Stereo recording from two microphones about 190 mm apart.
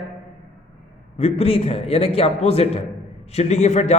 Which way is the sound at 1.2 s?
30° left (ahead or behind).